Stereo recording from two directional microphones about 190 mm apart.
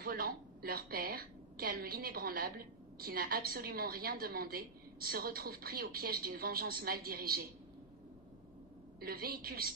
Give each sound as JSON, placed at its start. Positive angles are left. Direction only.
{"t": 0.0, "sound": "a woman's voice", "side_deg": -50}
{"t": 9.0, "sound": "a woman's voice", "side_deg": -50}